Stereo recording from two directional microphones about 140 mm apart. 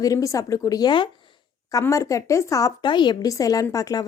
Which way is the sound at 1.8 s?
20° left (ahead or behind).